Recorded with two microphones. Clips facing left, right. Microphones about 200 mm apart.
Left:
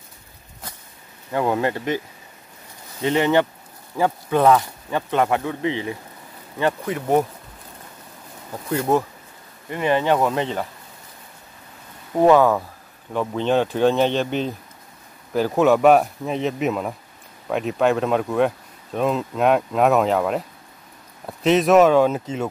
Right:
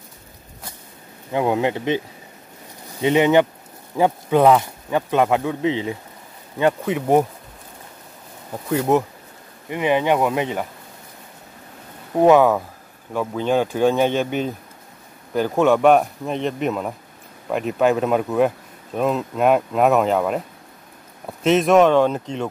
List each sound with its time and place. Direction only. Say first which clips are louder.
1.3 s speech: right 1 dB; 15° right (ahead or behind)
3.0 s speech: right 3 dB; 15° right (ahead or behind)
8.6 s speech: right 2 dB; 15° right (ahead or behind)
12.2 s speech: right 1 dB; 10° right (ahead or behind)
15.3 s speech: even; centre (ahead or behind)